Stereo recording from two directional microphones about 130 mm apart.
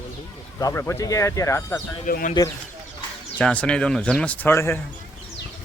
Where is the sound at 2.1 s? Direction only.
90° left.